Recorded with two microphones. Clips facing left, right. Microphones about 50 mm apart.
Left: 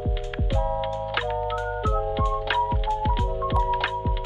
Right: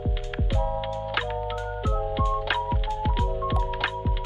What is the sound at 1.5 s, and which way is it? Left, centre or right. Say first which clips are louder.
Music: left 4 dB; left.